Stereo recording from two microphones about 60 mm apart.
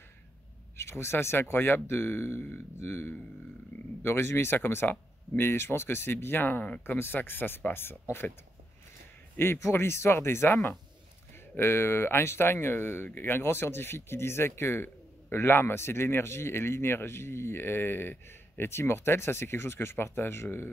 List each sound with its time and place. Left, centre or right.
0.7 s speech: left
6.6 s speech: left
7.0 s speech: left
9.4 s speech: left